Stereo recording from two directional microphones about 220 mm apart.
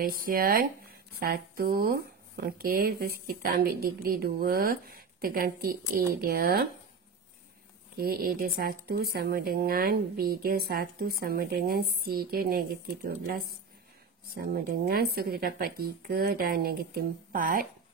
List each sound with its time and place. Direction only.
0.0 s speech: 40° right (ahead or behind)
8.0 s speech: 45° right (ahead or behind)